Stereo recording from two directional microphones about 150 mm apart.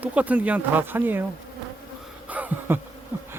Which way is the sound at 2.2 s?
10° right (ahead or behind).